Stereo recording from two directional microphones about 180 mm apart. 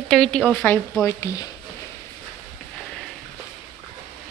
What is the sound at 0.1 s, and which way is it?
Speech, 5° left (ahead or behind).